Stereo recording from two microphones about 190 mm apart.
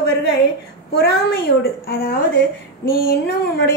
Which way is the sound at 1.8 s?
50° left (ahead or behind).